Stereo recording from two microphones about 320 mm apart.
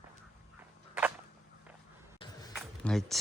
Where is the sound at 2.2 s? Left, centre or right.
Centre.